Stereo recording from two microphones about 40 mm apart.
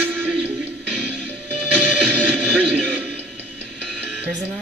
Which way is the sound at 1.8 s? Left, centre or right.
Left.